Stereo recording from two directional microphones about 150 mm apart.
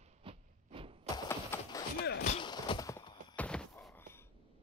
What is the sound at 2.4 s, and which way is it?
Horse, 30° left (ahead or behind).